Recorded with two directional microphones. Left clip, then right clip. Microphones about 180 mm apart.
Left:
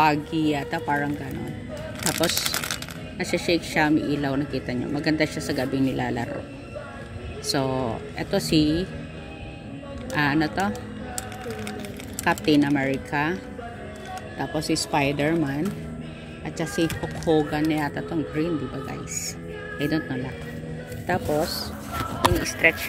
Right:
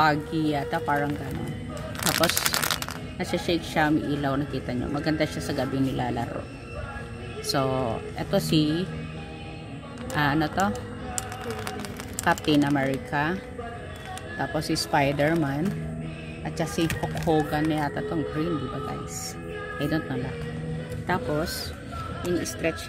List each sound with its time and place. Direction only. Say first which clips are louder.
0.0 s speech: left 2 dB; 5° left (ahead or behind)
2.1 s speech: right 1 dB; 30° right (ahead or behind)
3.2 s speech: left 3 dB; 5° left (ahead or behind)
7.4 s speech: even; 5° left (ahead or behind)
10.1 s speech: left 1 dB; 5° left (ahead or behind)
12.3 s speech: left 2 dB; 5° left (ahead or behind)
14.4 s speech: left 1 dB; centre (ahead or behind)
22.4 s speech: left 8 dB; 35° right (ahead or behind)